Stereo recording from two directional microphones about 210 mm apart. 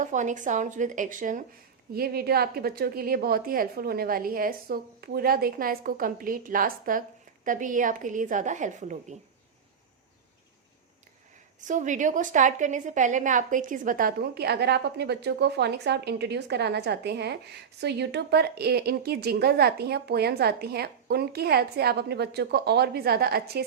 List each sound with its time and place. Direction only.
0.0 s a woman's voice: 35° right (ahead or behind)
11.6 s a woman's voice: 35° right (ahead or behind)